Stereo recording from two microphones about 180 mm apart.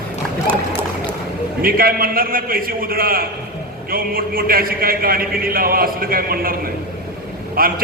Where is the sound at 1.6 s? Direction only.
55° right (ahead or behind).